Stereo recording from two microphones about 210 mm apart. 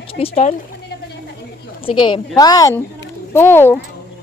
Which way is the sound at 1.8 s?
25° left (ahead or behind).